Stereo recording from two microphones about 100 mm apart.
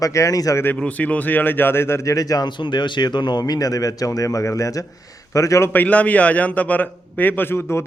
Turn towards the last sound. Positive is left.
turn(degrees=25)  # may be behind; listen again after turning